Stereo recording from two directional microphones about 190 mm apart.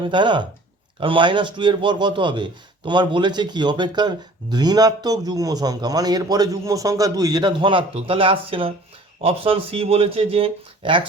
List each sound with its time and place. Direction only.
0.0 s a man's voice: 25° right (ahead or behind)